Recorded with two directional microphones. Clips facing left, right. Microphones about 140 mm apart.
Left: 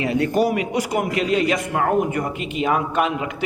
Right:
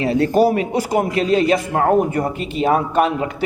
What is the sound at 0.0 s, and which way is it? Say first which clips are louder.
A man's voice: right 4 dB; 30° right (ahead or behind).